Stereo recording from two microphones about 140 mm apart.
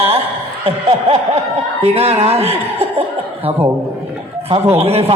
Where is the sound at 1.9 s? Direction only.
45° right (ahead or behind).